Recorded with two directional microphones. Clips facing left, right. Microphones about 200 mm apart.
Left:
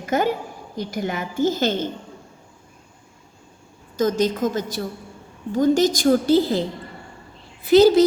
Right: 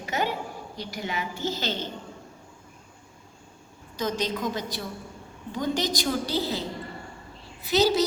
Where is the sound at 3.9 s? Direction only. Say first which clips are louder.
Left 8 dB; 45° left (ahead or behind).